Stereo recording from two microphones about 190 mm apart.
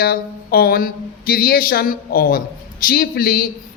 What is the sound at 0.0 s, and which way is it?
A man's voice, 55° left (ahead or behind).